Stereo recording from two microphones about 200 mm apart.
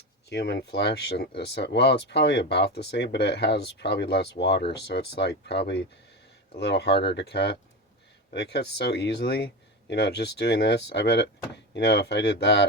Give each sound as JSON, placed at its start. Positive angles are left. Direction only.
{"t": 0.3, "sound": "speech", "side_deg": 55}